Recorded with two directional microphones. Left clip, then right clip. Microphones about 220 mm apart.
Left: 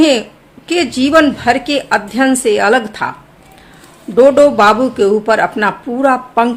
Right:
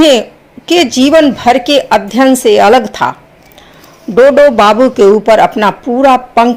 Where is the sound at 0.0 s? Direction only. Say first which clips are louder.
Right 5 dB; 25° right (ahead or behind).